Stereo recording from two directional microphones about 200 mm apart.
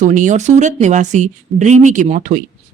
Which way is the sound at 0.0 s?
40° right (ahead or behind).